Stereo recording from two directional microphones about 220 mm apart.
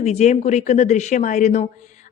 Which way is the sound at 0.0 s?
30° left (ahead or behind).